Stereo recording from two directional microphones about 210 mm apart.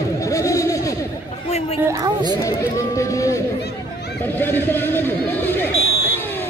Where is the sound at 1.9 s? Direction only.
15° right (ahead or behind).